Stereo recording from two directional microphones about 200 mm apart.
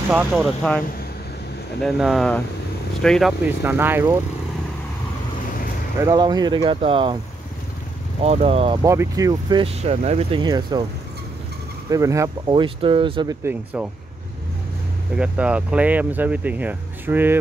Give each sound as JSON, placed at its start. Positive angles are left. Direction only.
{"t": 0.1, "sound": "speech", "side_deg": -10}
{"t": 1.8, "sound": "speech", "side_deg": 0}
{"t": 3.6, "sound": "speech", "side_deg": -10}
{"t": 5.9, "sound": "speech", "side_deg": -15}
{"t": 8.2, "sound": "speech", "side_deg": -30}
{"t": 8.8, "sound": "speech", "side_deg": -15}
{"t": 11.9, "sound": "speech", "side_deg": -15}
{"t": 13.4, "sound": "speech", "side_deg": -10}
{"t": 15.1, "sound": "speech", "side_deg": -5}